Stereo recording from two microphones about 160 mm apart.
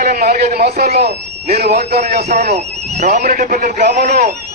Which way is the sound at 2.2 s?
45° right (ahead or behind).